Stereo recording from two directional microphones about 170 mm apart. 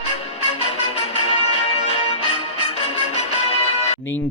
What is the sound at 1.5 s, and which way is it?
Music, 40° left (ahead or behind).